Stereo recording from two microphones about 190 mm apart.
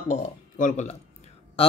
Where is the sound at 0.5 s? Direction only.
40° left (ahead or behind).